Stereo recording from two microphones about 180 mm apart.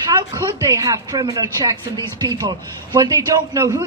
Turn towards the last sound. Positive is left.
turn(degrees=-15)  # may be behind; listen again after turning